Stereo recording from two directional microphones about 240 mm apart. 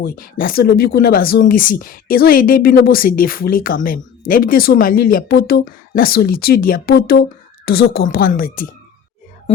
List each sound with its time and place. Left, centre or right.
0.0 s speech: left